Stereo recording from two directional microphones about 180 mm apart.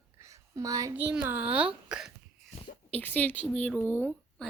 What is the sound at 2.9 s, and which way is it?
Speech, 10° left (ahead or behind).